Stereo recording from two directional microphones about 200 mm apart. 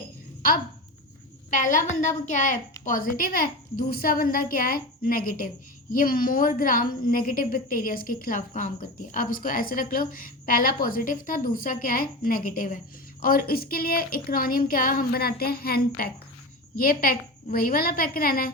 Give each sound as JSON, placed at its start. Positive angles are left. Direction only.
{"t": 1.5, "sound": "a woman's voice", "side_deg": 40}